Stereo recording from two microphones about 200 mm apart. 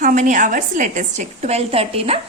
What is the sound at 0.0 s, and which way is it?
A woman's voice, 40° right (ahead or behind).